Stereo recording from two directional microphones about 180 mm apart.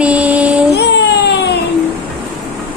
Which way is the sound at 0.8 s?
70° left (ahead or behind).